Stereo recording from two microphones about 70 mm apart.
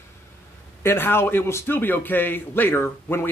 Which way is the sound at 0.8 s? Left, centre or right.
Left.